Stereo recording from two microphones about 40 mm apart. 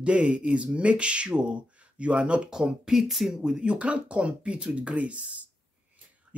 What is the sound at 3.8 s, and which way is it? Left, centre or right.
Speech, right.